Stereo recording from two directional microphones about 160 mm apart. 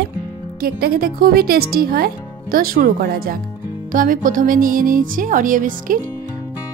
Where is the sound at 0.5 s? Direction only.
70° right (ahead or behind).